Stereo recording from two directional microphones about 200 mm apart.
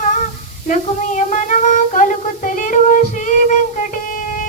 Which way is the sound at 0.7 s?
40° left (ahead or behind).